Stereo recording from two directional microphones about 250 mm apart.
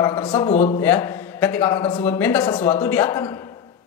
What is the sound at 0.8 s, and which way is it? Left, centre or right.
A man's voice, centre.